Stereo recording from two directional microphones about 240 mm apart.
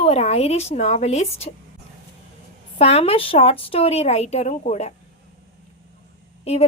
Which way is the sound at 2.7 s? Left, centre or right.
Left.